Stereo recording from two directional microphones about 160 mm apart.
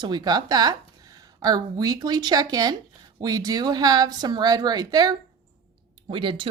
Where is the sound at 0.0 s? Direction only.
25° right (ahead or behind).